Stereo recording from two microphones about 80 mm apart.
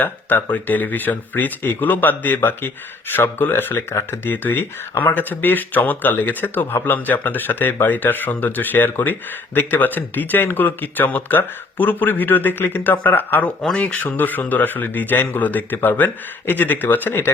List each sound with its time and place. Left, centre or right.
0.0 s speech: left
3.9 s speech: left
4.3 s speech: left
13.6 s speech: centre